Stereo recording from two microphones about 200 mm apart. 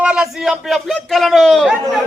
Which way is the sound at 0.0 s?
5° right (ahead or behind).